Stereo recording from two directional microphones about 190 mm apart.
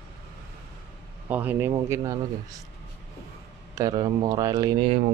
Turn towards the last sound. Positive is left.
turn(degrees=-20)  # may be behind; listen again after turning